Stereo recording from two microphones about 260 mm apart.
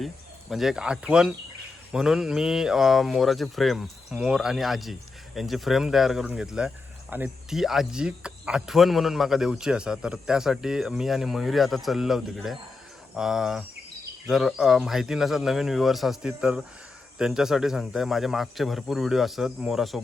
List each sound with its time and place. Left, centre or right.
0.5 s speech: centre